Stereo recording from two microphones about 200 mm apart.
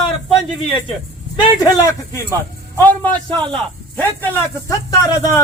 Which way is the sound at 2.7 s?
10° left (ahead or behind).